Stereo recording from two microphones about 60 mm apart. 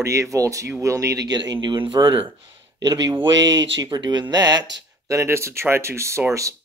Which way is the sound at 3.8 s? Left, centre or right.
Right.